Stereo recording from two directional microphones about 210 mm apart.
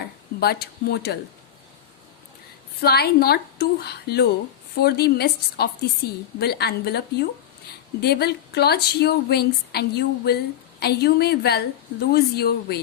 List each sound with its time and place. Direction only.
0.3 s a woman's voice: 50° left (ahead or behind)
2.8 s a woman's voice: 50° left (ahead or behind)